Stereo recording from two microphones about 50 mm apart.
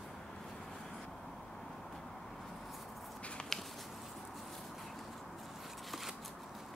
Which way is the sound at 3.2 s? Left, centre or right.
Left.